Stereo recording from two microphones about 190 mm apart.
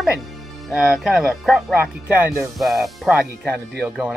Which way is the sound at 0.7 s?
5° right (ahead or behind).